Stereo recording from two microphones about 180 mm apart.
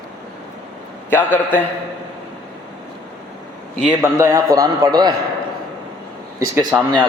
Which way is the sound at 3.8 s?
5° right (ahead or behind).